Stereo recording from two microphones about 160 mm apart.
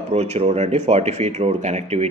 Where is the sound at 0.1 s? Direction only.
40° right (ahead or behind).